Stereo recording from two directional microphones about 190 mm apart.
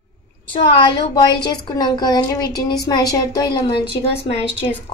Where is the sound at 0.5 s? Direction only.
25° left (ahead or behind).